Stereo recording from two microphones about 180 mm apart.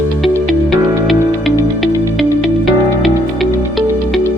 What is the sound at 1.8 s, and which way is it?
Music, centre (ahead or behind).